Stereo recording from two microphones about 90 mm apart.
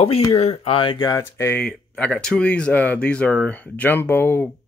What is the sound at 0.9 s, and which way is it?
Speech, 45° left (ahead or behind).